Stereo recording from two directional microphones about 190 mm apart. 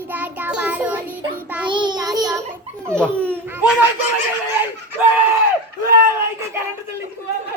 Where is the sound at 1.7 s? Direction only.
25° right (ahead or behind).